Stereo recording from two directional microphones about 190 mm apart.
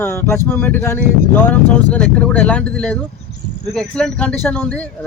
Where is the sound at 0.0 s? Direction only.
15° left (ahead or behind).